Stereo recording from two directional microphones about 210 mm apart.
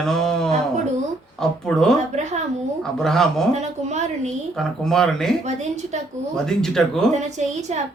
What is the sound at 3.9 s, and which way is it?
Speech, 35° right (ahead or behind).